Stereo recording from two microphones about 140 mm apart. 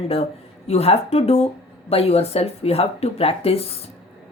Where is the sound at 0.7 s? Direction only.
45° left (ahead or behind).